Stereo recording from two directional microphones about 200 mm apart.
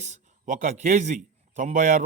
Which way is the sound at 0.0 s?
35° right (ahead or behind).